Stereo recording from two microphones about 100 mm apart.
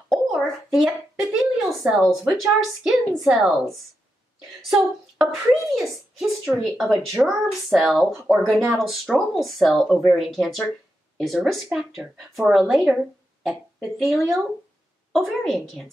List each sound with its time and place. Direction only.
0.3 s speech: 5° right (ahead or behind)
8.5 s speech: 35° right (ahead or behind)
8.7 s a woman's voice: centre (ahead or behind)